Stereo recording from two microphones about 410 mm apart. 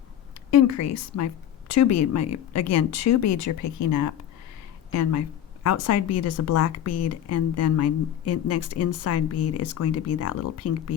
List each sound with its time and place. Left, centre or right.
0.5 s a woman's voice: left